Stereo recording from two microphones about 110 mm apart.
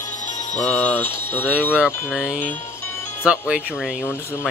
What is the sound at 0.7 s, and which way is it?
Speech, 20° left (ahead or behind).